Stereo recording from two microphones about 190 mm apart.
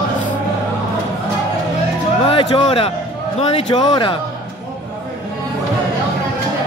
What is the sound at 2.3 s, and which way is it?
Speech, 25° left (ahead or behind).